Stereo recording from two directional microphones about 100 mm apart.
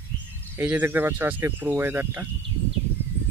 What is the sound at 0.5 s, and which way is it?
Speech, 15° right (ahead or behind).